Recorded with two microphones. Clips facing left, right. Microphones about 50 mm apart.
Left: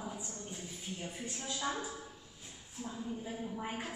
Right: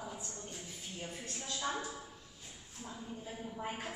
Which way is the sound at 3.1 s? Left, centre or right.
Centre.